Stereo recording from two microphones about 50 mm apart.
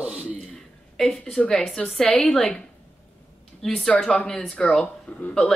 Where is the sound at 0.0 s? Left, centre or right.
Right.